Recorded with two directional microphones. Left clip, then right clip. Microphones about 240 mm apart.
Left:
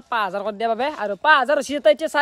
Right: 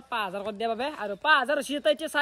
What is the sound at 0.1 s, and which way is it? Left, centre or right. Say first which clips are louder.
Speech: left 8 dB; centre.